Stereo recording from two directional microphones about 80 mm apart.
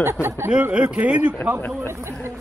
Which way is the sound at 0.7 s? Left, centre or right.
Centre.